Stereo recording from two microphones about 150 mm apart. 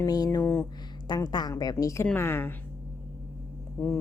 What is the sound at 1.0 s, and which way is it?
A woman's voice, 30° left (ahead or behind).